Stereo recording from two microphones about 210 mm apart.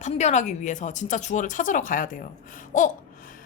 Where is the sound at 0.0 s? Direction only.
35° left (ahead or behind).